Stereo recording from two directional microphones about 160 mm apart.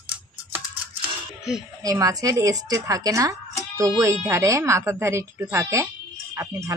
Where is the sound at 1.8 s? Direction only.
20° right (ahead or behind).